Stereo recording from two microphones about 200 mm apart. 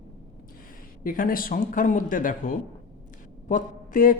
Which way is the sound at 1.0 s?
45° left (ahead or behind).